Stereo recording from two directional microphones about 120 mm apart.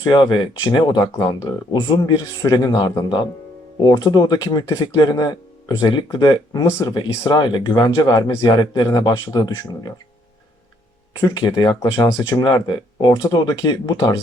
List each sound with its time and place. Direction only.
0.1 s speech: 40° left (ahead or behind)
11.2 s speech: 35° left (ahead or behind)